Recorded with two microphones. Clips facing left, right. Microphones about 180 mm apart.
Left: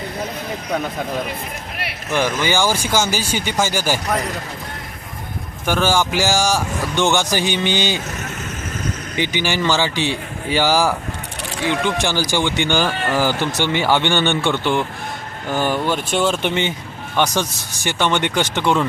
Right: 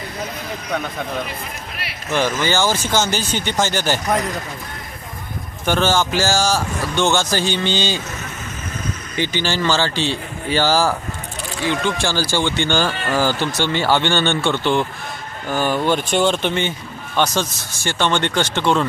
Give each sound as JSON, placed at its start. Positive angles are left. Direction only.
{"t": 2.1, "sound": "speech", "side_deg": 15}
{"t": 5.6, "sound": "speech", "side_deg": 10}
{"t": 9.1, "sound": "speech", "side_deg": 15}
{"t": 15.9, "sound": "speech", "side_deg": 0}
{"t": 16.4, "sound": "speech", "side_deg": 15}